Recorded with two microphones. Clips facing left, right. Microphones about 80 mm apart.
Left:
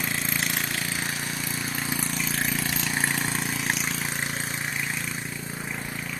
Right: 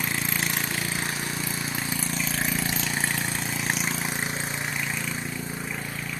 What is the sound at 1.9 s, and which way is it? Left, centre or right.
Vehicle, centre.